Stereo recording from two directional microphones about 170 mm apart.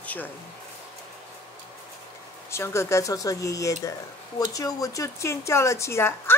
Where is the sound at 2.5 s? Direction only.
15° left (ahead or behind).